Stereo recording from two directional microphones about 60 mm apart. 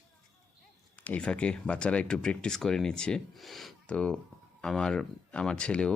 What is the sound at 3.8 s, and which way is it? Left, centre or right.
Speech, centre.